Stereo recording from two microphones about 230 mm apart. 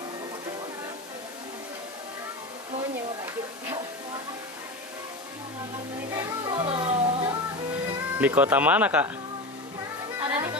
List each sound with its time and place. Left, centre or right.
6.1 s speech: centre
7.7 s speech: centre
10.1 s music: centre